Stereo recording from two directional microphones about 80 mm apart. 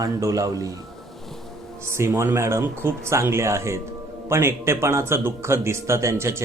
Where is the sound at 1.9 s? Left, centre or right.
Right.